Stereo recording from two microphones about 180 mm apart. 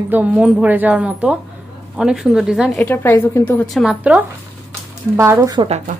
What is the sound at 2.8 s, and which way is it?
A woman's voice, 10° left (ahead or behind).